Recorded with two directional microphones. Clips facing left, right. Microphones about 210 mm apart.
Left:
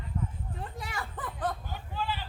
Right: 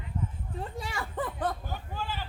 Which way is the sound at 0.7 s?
25° right (ahead or behind).